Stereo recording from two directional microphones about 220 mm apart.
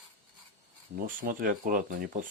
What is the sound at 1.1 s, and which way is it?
Speech, 40° right (ahead or behind).